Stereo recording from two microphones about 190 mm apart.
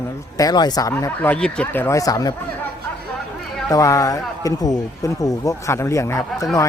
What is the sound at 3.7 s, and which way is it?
A man's voice, 15° left (ahead or behind).